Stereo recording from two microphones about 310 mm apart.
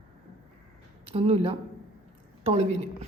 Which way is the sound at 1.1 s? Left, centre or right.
Centre.